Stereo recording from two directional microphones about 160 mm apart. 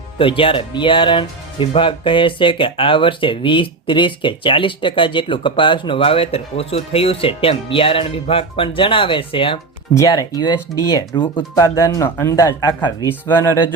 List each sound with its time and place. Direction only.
0.2 s speech: 35° left (ahead or behind)
9.9 s speech: 20° left (ahead or behind)